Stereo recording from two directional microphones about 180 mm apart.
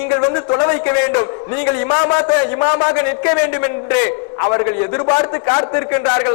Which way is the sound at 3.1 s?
15° left (ahead or behind).